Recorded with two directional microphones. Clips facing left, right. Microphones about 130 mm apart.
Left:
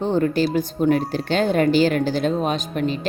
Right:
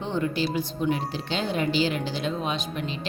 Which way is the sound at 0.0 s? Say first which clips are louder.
Left 7 dB; 45° left (ahead or behind).